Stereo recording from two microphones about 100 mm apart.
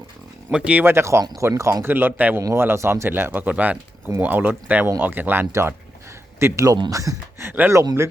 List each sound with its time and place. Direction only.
0.5 s speech: 15° right (ahead or behind); by 7.4 s 35° right (ahead or behind)
7.4 s speech: 20° right (ahead or behind)